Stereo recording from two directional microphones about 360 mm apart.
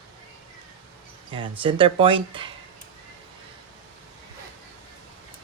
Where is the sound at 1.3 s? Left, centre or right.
Centre.